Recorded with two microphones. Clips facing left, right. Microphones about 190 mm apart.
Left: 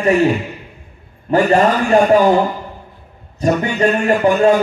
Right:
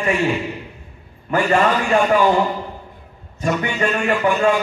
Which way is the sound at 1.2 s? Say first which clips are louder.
Left 4 dB; 40° left (ahead or behind).